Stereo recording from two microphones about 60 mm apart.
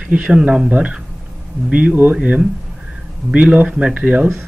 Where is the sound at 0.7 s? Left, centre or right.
Right.